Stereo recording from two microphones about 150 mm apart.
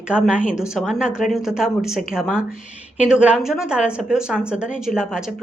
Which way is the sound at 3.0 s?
5° right (ahead or behind).